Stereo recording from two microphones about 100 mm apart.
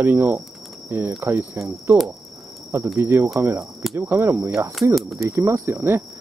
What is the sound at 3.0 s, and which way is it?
Speech, 25° right (ahead or behind).